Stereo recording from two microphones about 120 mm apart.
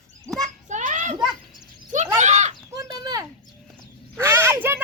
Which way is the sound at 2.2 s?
75° right (ahead or behind).